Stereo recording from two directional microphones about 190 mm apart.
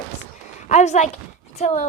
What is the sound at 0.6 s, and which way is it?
A woman's voice, 40° left (ahead or behind).